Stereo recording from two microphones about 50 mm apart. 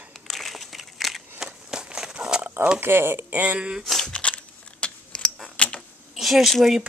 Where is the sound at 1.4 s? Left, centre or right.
Centre.